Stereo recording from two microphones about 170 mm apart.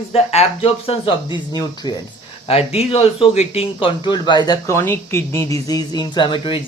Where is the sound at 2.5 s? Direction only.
35° left (ahead or behind).